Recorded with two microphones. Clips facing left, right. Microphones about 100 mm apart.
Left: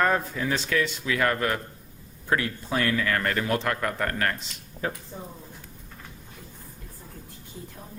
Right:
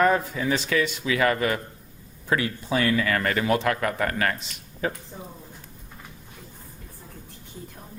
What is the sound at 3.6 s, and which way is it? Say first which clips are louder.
Speech: right 3 dB; 90° right.